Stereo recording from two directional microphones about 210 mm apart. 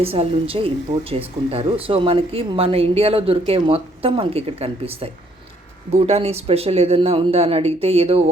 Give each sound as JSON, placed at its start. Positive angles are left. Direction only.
{"t": 0.0, "sound": "speech", "side_deg": -30}